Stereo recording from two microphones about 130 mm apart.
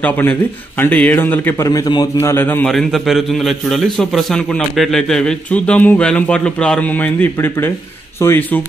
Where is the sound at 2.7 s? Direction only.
Centre (ahead or behind).